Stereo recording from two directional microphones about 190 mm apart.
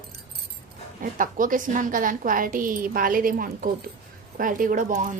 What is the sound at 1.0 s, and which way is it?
A woman's voice, 45° right (ahead or behind).